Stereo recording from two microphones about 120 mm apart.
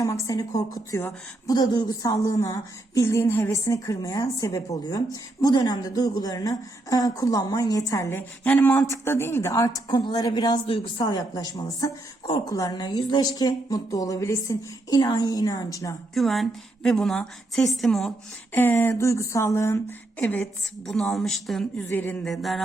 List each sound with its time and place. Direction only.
0.0 s a woman's voice: 30° left (ahead or behind)
1.5 s a woman's voice: 35° left (ahead or behind)
16.1 s a woman's voice: centre (ahead or behind)
18.5 s a woman's voice: 15° left (ahead or behind)
20.8 s a woman's voice: 5° left (ahead or behind)
21.8 s a woman's voice: 15° left (ahead or behind)